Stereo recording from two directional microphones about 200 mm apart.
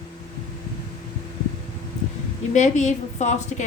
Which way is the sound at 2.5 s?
35° left (ahead or behind).